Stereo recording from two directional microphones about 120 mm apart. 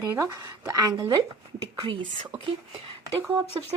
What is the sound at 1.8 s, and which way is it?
Speech, 45° right (ahead or behind).